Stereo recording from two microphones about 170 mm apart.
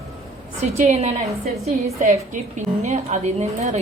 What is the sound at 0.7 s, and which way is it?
A woman's voice, 40° right (ahead or behind).